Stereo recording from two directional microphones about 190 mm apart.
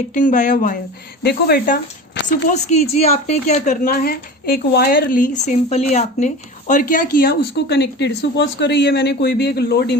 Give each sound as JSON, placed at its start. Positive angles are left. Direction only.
{"t": 0.1, "sound": "a woman's voice", "side_deg": 45}
{"t": 1.2, "sound": "a woman's voice", "side_deg": 55}
{"t": 2.5, "sound": "a woman's voice", "side_deg": 40}